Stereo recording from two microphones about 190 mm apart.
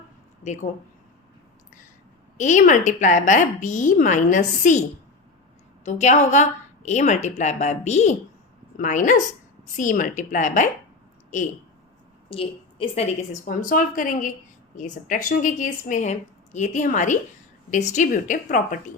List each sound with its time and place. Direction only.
0.4 s a woman's voice: 40° left (ahead or behind)
2.4 s a woman's voice: 40° left (ahead or behind)
12.3 s a woman's voice: 30° left (ahead or behind); by 18.8 s 45° left (ahead or behind)